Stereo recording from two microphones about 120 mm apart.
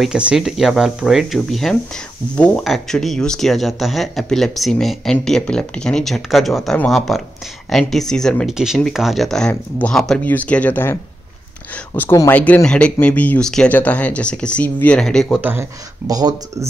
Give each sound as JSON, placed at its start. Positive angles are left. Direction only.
{"t": 0.0, "sound": "speech", "side_deg": -5}
{"t": 2.6, "sound": "speech", "side_deg": 0}
{"t": 9.5, "sound": "speech", "side_deg": 15}
{"t": 9.9, "sound": "speech", "side_deg": 5}
{"t": 15.3, "sound": "speech", "side_deg": -15}
{"t": 16.1, "sound": "speech", "side_deg": -30}